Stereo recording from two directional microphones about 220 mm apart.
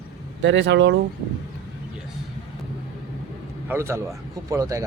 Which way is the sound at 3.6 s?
10° right (ahead or behind).